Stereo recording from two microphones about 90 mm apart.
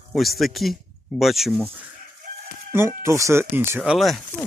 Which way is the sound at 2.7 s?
30° right (ahead or behind).